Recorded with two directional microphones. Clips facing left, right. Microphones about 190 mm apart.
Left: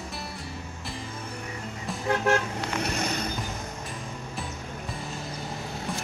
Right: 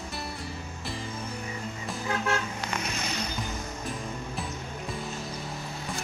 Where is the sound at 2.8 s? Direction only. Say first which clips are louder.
Left 4 dB; 60° left (ahead or behind).